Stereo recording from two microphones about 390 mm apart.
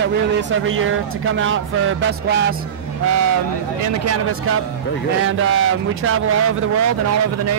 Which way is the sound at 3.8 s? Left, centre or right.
Right.